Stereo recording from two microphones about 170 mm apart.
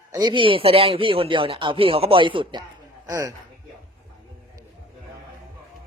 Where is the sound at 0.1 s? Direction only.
25° right (ahead or behind).